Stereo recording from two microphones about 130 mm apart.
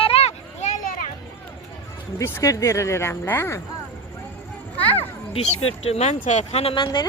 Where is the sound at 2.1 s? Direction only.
20° left (ahead or behind).